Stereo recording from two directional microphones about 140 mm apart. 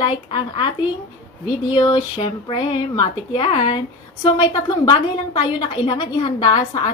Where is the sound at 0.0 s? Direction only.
35° left (ahead or behind).